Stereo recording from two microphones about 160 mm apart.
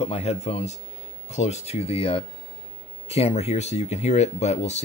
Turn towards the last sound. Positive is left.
turn(degrees=45)  # may be behind; listen again after turning